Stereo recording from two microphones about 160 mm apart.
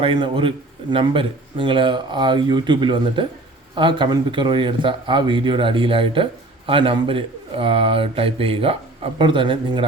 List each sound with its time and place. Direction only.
0.0 s a man's voice: 30° right (ahead or behind)